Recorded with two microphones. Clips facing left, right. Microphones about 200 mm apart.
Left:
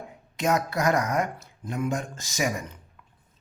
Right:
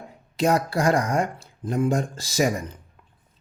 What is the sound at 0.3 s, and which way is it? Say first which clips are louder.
Speech: right 4 dB; 35° right (ahead or behind).